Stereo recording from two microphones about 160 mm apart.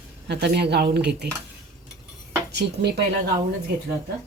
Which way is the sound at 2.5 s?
90° right.